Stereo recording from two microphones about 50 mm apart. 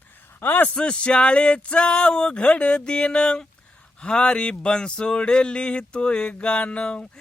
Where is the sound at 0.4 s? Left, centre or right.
Left.